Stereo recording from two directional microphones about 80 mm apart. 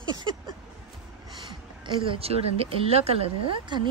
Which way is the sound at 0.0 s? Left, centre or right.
Right.